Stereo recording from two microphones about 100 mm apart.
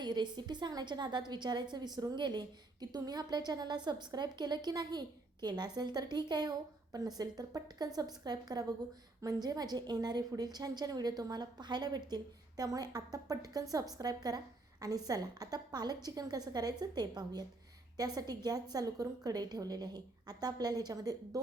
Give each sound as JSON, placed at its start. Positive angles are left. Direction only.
{"t": 0.0, "sound": "a woman's voice", "side_deg": -45}